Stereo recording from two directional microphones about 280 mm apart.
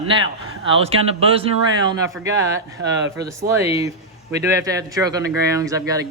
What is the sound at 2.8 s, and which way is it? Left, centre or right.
Speech, right.